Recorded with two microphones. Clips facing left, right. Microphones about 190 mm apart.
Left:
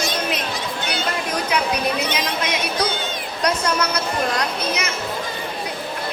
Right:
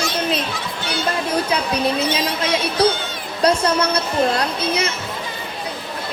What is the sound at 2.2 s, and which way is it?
Speech, 30° right (ahead or behind).